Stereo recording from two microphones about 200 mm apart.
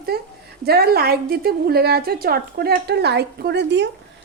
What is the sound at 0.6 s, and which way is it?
A woman's voice, 50° right (ahead or behind).